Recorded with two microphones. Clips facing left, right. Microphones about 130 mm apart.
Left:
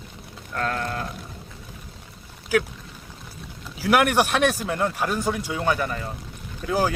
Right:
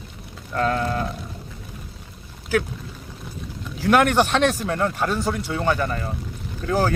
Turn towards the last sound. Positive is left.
turn(degrees=10)  # may be behind; listen again after turning